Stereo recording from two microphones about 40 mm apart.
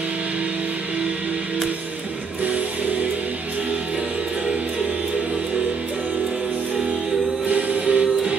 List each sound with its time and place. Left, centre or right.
7.4 s music: right
7.8 s music: right